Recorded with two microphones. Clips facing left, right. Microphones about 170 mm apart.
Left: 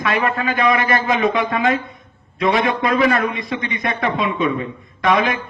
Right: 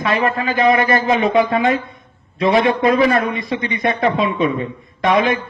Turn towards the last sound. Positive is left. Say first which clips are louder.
# right 2 dB
turn(degrees=-30)  # may be behind; listen again after turning